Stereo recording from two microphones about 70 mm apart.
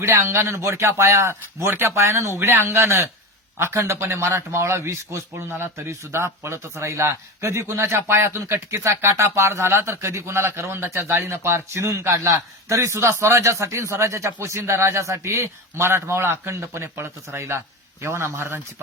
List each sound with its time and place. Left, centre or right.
0.0 s a man's voice: right